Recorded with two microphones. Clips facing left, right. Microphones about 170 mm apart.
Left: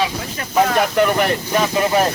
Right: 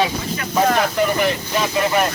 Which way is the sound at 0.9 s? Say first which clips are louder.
Left 2 dB; 60° left (ahead or behind).